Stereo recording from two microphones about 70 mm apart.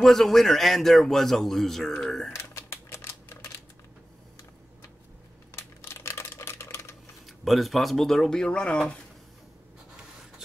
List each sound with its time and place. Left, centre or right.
0.0 s a man's voice: centre
2.3 s typewriter: left
5.5 s typewriter: left
7.2 s a man's voice: centre